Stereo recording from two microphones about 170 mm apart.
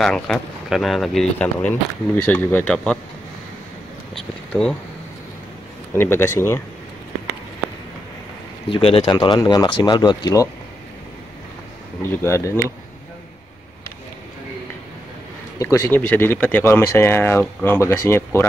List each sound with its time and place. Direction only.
0.0 s speech: centre (ahead or behind)
4.1 s a sound: 5° left (ahead or behind)
5.9 s speech: 15° left (ahead or behind)
8.6 s speech: 30° left (ahead or behind)
12.0 s speech: 15° left (ahead or behind)
15.6 s speech: 15° left (ahead or behind)